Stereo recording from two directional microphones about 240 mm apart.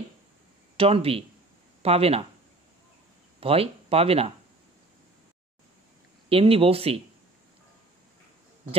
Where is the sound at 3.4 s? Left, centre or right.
Right.